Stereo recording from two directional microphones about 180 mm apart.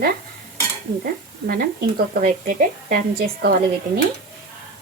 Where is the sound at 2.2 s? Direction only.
50° right (ahead or behind).